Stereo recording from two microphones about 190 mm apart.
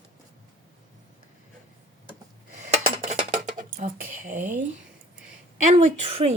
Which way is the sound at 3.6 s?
40° right (ahead or behind).